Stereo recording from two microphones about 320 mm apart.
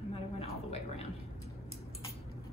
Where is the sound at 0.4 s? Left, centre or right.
Centre.